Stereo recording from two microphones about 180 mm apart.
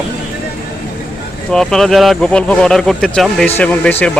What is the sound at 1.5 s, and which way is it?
Speech, centre (ahead or behind).